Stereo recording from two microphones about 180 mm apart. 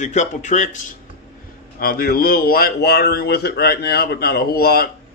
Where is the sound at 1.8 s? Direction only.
55° left (ahead or behind).